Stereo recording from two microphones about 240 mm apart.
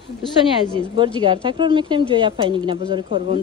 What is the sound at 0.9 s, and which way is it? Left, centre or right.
A woman's voice, centre.